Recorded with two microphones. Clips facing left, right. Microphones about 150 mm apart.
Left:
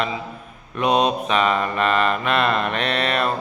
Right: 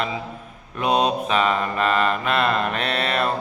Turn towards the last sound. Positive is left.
turn(degrees=-30)  # may be behind; listen again after turning